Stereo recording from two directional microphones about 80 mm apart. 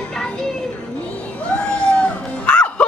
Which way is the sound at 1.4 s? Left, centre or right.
Centre.